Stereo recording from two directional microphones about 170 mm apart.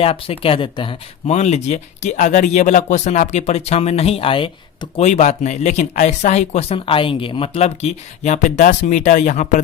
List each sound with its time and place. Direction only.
0.0 s speech: 35° left (ahead or behind)